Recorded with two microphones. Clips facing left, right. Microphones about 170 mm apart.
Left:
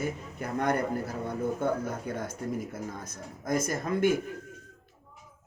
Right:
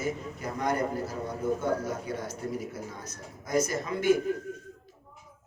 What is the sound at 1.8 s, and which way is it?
Speech, 50° left (ahead or behind).